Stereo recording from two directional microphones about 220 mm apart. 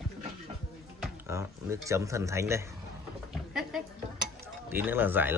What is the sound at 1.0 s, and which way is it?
Speech, 10° right (ahead or behind).